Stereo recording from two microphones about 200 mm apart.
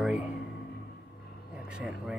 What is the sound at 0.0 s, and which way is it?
Music, 5° right (ahead or behind).